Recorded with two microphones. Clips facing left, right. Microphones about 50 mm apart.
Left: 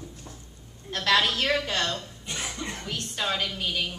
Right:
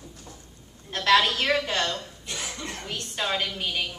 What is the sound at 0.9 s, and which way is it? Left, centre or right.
A woman's voice, centre.